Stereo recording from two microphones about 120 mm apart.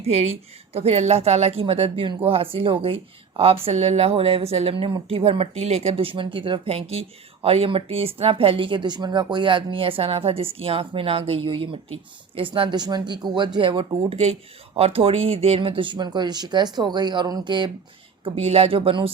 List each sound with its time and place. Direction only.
0.0 s speech: 60° right (ahead or behind); by 17.7 s 40° right (ahead or behind)
18.3 s speech: 55° right (ahead or behind)